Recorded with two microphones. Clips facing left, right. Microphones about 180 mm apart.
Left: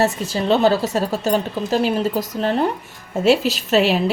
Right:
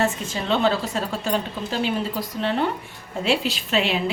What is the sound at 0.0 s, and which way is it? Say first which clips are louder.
A woman's voice: left 5 dB; 40° left (ahead or behind).